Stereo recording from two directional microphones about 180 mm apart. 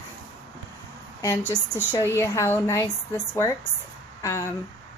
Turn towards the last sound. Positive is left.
turn(degrees=15)  # may be behind; listen again after turning